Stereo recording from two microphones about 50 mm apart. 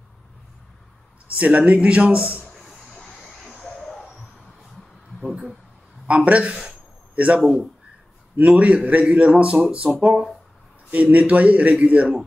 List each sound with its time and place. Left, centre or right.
1.2 s a man's voice: right
2.4 s vehicle: centre
3.3 s a sound: centre
6.0 s a man's voice: right
7.3 s speech: centre
8.4 s a man's voice: right